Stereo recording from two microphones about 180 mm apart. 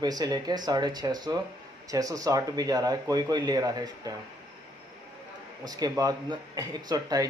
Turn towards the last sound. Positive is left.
turn(degrees=-20)  # may be behind; listen again after turning